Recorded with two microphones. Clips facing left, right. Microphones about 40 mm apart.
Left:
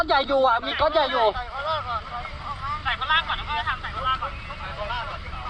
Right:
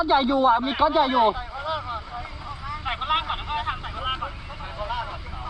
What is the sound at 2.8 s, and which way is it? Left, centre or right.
Speech, left.